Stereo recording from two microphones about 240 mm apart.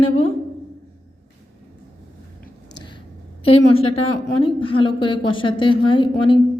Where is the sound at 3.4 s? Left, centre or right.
Left.